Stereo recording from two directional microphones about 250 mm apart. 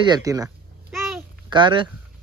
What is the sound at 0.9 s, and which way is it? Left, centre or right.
Babbling, centre.